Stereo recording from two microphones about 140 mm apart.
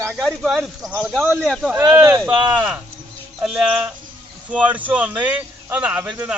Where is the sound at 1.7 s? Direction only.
10° right (ahead or behind).